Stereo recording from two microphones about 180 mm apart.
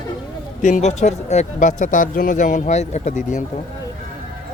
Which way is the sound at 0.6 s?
40° left (ahead or behind).